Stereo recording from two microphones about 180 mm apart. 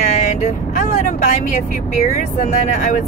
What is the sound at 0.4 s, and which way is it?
Speech, 45° left (ahead or behind).